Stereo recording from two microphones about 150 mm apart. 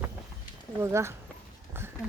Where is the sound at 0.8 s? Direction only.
20° right (ahead or behind).